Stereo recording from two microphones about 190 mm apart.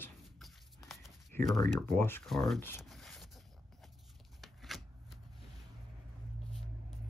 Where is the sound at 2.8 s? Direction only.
Centre (ahead or behind).